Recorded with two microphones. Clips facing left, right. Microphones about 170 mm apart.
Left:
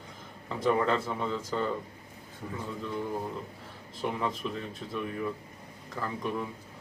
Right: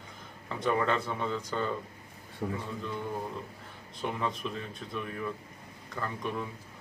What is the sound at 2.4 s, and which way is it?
Speech, 60° right (ahead or behind).